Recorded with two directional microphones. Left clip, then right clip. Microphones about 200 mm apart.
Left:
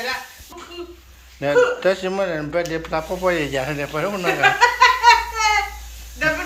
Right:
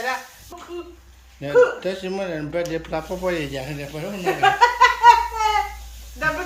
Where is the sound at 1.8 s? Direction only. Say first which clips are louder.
Left 7 dB; centre (ahead or behind).